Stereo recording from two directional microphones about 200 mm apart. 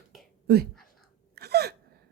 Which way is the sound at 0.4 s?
50° right (ahead or behind).